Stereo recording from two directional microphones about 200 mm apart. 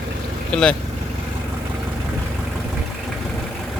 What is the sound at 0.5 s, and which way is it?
Speech, 5° left (ahead or behind).